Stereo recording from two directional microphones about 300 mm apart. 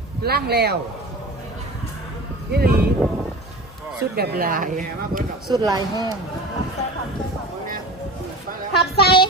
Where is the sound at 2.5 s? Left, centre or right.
Right.